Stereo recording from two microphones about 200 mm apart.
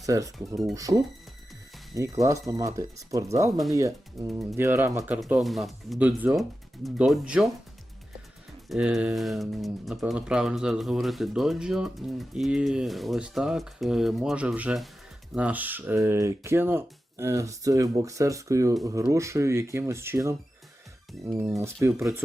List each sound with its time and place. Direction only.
0.0 s speech: 15° right (ahead or behind)
8.7 s speech: 5° right (ahead or behind)
21.3 s speech: 15° right (ahead or behind)